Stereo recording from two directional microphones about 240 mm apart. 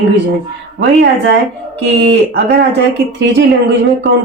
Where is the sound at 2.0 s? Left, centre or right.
Right.